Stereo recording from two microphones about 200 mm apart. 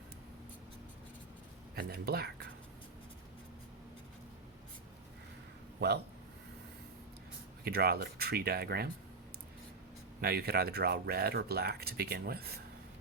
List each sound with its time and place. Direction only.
1.7 s speech: 50° right (ahead or behind)
7.6 s speech: 50° right (ahead or behind)
10.2 s speech: 50° right (ahead or behind)